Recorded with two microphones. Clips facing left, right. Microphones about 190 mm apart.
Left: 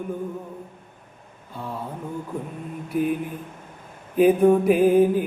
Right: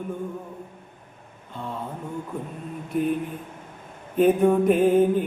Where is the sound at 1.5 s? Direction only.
5° left (ahead or behind).